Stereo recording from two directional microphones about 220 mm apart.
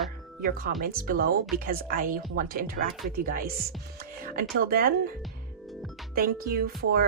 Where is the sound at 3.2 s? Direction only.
40° right (ahead or behind).